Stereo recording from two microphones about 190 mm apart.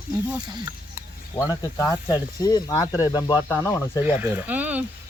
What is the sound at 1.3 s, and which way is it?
Speech, 15° left (ahead or behind).